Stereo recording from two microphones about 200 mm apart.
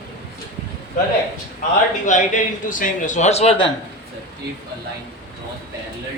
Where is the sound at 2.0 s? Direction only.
40° left (ahead or behind).